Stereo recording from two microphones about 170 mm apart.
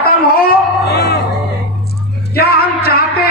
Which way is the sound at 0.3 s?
60° left (ahead or behind).